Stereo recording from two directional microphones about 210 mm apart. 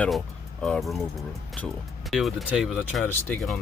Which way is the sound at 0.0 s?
5° left (ahead or behind).